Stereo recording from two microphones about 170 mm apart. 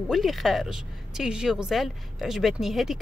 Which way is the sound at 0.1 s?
Centre (ahead or behind).